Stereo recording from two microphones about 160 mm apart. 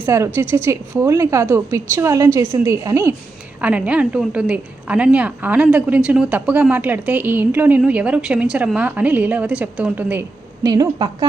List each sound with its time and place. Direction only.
0.0 s a woman's voice: 15° right (ahead or behind)
10.6 s a woman's voice: 25° right (ahead or behind)